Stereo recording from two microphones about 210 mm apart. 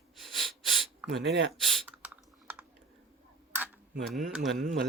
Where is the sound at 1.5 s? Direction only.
5° right (ahead or behind).